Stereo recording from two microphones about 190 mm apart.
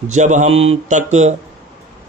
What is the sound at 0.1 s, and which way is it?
Speech, 40° right (ahead or behind).